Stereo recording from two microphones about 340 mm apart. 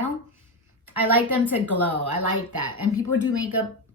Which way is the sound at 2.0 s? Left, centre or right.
Right.